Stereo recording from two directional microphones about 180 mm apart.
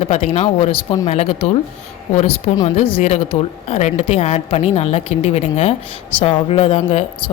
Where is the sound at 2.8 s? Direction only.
30° left (ahead or behind).